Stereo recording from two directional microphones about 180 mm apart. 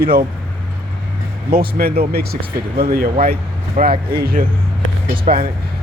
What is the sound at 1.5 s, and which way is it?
Speech, 55° right (ahead or behind).